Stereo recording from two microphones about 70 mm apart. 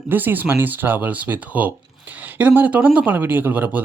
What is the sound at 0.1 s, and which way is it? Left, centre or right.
Speech, right.